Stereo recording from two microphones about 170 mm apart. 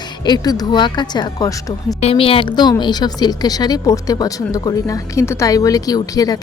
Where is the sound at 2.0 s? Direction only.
35° left (ahead or behind).